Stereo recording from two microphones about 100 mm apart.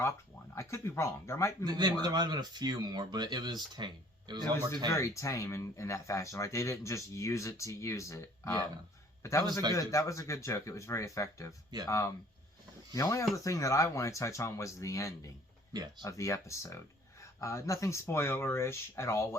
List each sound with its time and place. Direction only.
0.5 s speech: 30° left (ahead or behind)
1.6 s speech: 45° right (ahead or behind)
4.9 s speech: 30° left (ahead or behind)
15.7 s speech: 45° right (ahead or behind)
16.0 s speech: 30° left (ahead or behind)